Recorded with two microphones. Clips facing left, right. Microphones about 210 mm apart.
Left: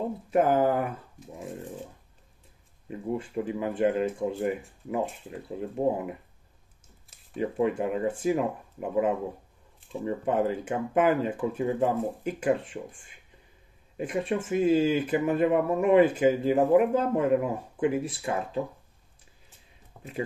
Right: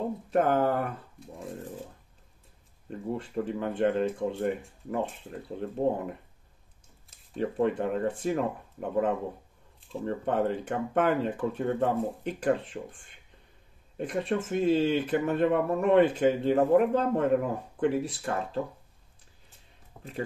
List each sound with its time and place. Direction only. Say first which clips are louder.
0.3 s speech: left 2 dB; 5° left (ahead or behind)
2.9 s speech: left 2 dB; 5° left (ahead or behind)
20.0 s speech: left 2 dB; 5° left (ahead or behind)